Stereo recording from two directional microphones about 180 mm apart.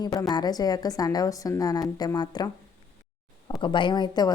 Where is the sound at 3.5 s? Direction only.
25° left (ahead or behind).